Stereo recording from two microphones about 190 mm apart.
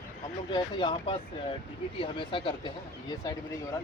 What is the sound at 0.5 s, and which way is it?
Speech, 25° left (ahead or behind).